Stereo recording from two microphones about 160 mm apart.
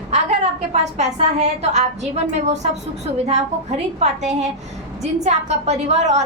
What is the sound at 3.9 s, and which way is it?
A woman's voice, 45° right (ahead or behind).